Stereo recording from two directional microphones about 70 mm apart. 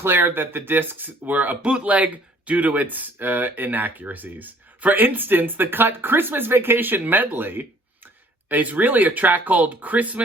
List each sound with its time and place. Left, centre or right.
0.0 s speech: right